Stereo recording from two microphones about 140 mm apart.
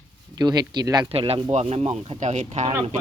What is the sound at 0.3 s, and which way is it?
Speech, 30° right (ahead or behind).